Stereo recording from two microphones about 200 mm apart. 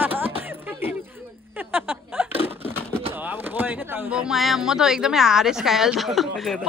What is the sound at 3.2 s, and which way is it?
Speech, 10° right (ahead or behind).